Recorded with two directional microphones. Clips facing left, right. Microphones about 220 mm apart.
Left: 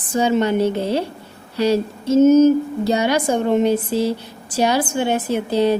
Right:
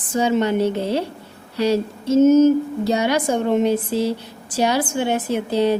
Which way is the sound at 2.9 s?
35° left (ahead or behind).